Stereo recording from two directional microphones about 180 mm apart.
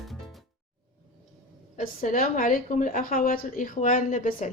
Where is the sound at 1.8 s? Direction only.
50° left (ahead or behind).